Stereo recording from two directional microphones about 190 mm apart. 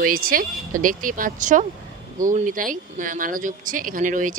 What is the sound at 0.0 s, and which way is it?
Speech, 50° right (ahead or behind).